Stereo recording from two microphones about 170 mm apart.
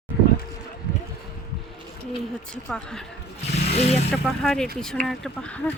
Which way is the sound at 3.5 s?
40° left (ahead or behind).